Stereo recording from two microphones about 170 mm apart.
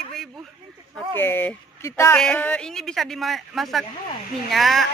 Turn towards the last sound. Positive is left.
turn(degrees=0)  # may be behind; listen again after turning